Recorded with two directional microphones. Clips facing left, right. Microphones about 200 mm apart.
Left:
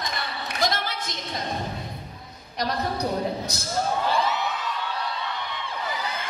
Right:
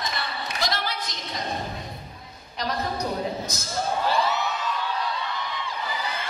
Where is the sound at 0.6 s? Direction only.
50° left (ahead or behind).